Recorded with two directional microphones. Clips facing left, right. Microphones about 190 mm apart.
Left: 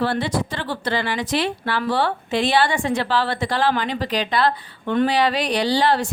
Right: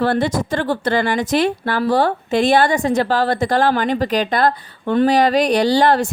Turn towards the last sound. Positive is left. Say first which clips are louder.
# right 5 dB
turn(degrees=-45)  # may be behind; listen again after turning